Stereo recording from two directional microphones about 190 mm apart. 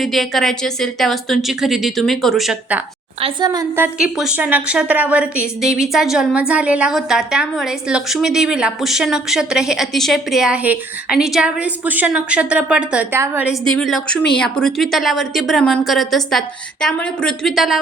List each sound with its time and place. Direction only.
0.0 s a woman's voice: centre (ahead or behind)
3.2 s a woman's voice: 25° right (ahead or behind)
3.9 s a woman's voice: 5° right (ahead or behind)
13.5 s a woman's voice: centre (ahead or behind)